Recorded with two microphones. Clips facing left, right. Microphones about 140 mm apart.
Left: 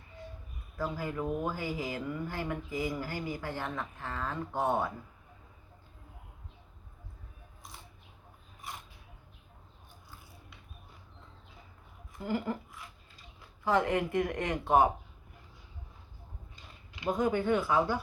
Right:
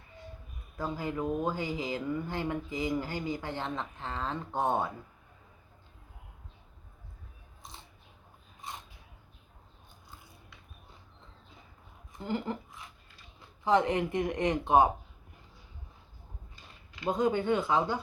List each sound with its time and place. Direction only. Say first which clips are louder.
0.8 s speech: right 1 dB; 20° right (ahead or behind)
8.6 s a sound: right 1 dB; 20° right (ahead or behind)
12.1 s speech: left 1 dB; 25° right (ahead or behind)
13.7 s speech: right 2 dB; 20° right (ahead or behind)
17.1 s speech: right 1 dB; 20° right (ahead or behind)